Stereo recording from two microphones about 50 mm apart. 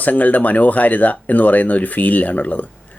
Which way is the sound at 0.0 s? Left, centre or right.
Left.